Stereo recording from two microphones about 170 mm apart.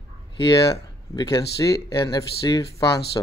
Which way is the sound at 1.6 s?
20° left (ahead or behind).